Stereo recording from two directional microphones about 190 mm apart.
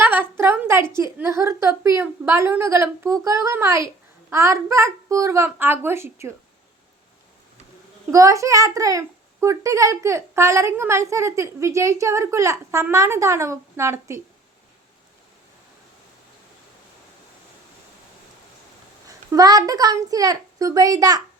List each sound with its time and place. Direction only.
0.0 s a sound: 10° right (ahead or behind)
0.9 s a child's voice: 15° right (ahead or behind)
8.1 s a child's voice: 15° right (ahead or behind)
19.0 s a child's voice: 20° right (ahead or behind)